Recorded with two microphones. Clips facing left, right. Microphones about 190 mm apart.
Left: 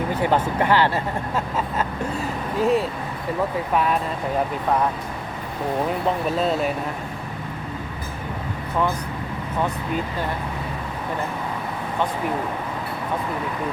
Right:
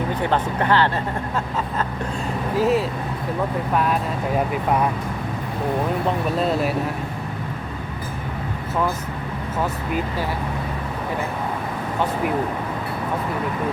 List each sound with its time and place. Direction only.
0.1 s speech: 10° left (ahead or behind)
2.6 s speech: centre (ahead or behind)
6.3 s speech: centre (ahead or behind)